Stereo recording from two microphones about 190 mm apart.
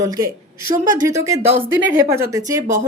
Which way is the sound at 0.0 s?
20° right (ahead or behind).